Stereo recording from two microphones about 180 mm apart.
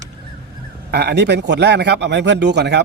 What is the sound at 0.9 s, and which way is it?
Speech, 65° right (ahead or behind).